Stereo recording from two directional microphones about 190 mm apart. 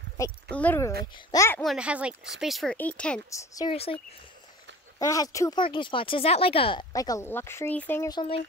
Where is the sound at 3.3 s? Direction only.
15° left (ahead or behind).